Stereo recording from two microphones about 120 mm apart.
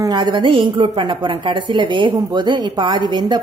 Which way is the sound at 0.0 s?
35° right (ahead or behind).